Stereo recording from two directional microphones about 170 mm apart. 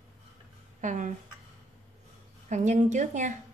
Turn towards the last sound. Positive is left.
turn(degrees=-45)  # may be behind; listen again after turning